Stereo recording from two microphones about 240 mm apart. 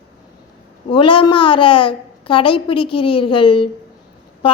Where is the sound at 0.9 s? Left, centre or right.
Left.